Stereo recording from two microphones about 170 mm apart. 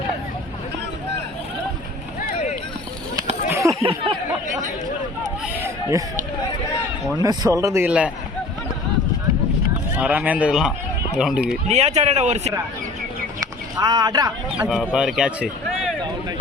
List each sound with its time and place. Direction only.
3.5 s a sound: 15° right (ahead or behind)
3.8 s speech: 30° right (ahead or behind)
7.2 s speech: 20° right (ahead or behind)
10.0 s speech: 10° right (ahead or behind)
11.7 s a man's voice: 40° right (ahead or behind)
13.4 s speech: 25° right (ahead or behind)
14.8 s speech: 5° right (ahead or behind)